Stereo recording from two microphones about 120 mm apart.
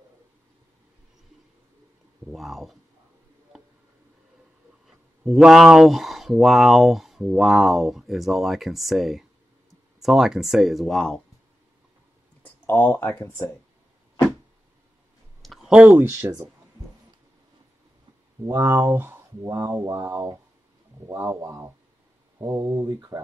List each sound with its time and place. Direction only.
2.3 s speech: centre (ahead or behind)
4.8 s speech: 5° right (ahead or behind)
12.4 s a sound: 15° left (ahead or behind)
12.9 s speech: 15° left (ahead or behind)
15.4 s a sound: 5° right (ahead or behind)
15.9 s speech: 25° right (ahead or behind)
18.5 s speech: 25° right (ahead or behind)